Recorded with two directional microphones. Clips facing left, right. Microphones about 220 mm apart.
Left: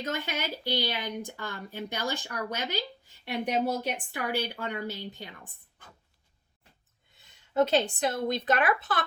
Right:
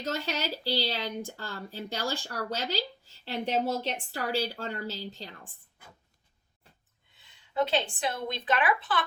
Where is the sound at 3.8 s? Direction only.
15° left (ahead or behind).